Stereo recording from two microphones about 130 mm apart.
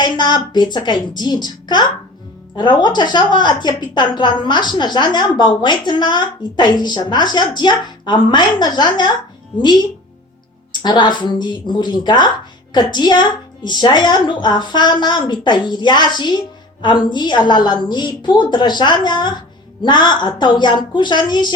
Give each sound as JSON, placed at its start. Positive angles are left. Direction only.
{"t": 0.0, "sound": "a woman's voice", "side_deg": 35}
{"t": 10.7, "sound": "a woman's voice", "side_deg": 35}